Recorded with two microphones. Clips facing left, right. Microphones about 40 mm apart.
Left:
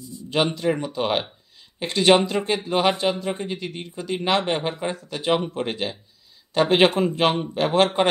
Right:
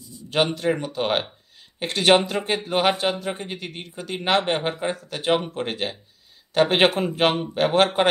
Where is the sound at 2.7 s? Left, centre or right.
Centre.